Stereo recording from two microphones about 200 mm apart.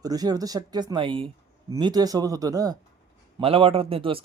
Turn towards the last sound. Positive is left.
turn(degrees=-30)  # may be behind; listen again after turning